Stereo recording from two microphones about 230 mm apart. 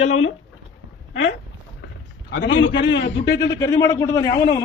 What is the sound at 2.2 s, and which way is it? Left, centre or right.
A man's voice, left.